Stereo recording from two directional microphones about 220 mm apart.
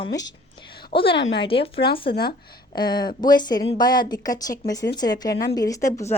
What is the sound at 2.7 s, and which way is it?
A woman's voice, 20° left (ahead or behind).